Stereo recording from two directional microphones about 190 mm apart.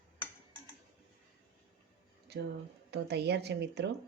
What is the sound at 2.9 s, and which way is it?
Speech, 60° right (ahead or behind).